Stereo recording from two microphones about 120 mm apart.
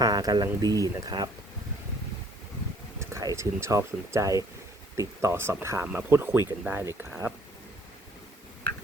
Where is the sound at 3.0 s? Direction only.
25° right (ahead or behind).